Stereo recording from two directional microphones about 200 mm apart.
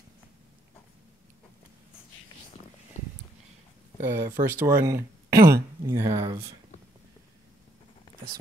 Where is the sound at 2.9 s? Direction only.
35° left (ahead or behind).